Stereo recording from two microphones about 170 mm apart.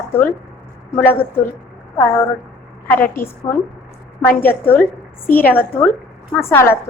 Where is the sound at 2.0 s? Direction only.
15° left (ahead or behind).